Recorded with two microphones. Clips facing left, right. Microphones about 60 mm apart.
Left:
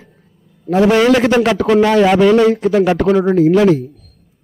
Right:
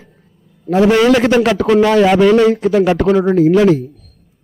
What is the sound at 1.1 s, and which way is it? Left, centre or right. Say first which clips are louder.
A man's voice: even; centre.